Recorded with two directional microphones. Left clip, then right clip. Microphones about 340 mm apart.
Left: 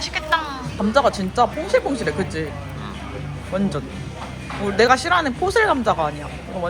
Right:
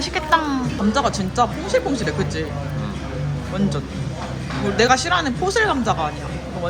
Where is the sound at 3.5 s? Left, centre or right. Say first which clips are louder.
Left 1 dB; left.